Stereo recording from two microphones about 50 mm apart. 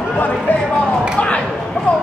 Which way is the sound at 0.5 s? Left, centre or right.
Left.